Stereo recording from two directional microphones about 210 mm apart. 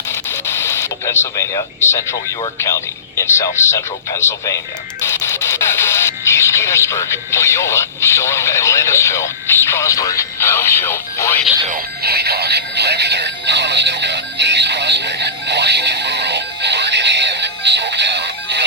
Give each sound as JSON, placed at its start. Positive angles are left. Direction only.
{"t": 0.1, "sound": "speech", "side_deg": 10}
{"t": 11.7, "sound": "music", "side_deg": -50}